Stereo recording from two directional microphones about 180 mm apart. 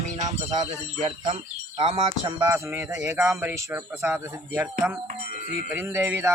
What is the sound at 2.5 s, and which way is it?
Speech, 15° right (ahead or behind).